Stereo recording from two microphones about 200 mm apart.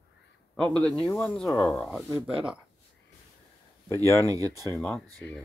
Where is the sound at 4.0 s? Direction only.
15° right (ahead or behind).